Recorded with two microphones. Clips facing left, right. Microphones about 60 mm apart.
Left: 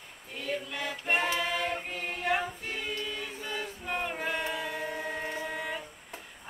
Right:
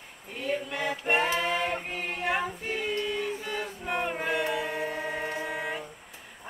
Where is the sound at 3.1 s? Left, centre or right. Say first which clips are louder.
Right 5 dB; centre.